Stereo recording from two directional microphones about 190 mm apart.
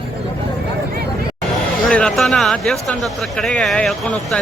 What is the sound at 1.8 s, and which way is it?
Speech, 5° left (ahead or behind).